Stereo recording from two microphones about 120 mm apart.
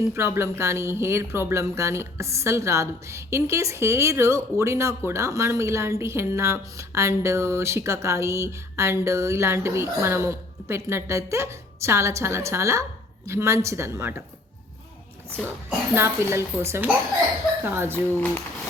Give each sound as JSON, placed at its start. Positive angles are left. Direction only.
{"t": 0.1, "sound": "speech", "side_deg": -20}
{"t": 16.0, "sound": "speech", "side_deg": -20}
{"t": 18.1, "sound": "speech", "side_deg": 15}